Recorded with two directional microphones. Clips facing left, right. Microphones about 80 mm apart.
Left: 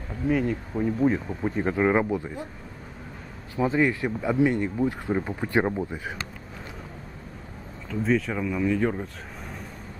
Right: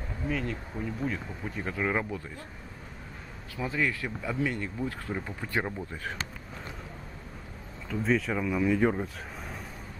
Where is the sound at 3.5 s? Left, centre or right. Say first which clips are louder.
Left 7 dB; left.